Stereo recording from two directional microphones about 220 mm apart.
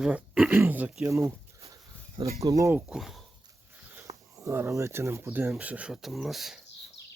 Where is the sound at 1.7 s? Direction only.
15° right (ahead or behind).